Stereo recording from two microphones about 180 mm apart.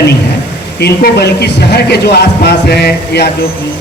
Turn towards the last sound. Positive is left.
turn(degrees=65)  # may be behind; listen again after turning